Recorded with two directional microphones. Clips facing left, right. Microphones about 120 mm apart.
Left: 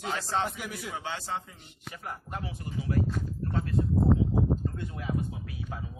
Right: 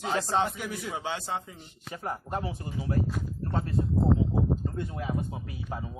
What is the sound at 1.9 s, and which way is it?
Speech, 30° right (ahead or behind).